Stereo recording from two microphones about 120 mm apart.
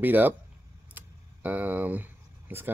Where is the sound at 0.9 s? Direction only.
15° right (ahead or behind).